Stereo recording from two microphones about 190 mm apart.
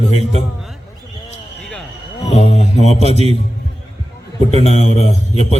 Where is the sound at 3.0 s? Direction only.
35° right (ahead or behind).